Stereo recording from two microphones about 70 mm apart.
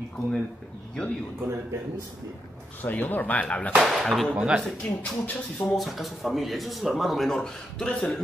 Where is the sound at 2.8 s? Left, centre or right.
Left.